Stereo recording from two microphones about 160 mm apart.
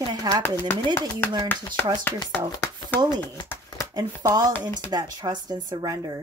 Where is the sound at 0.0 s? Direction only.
25° right (ahead or behind).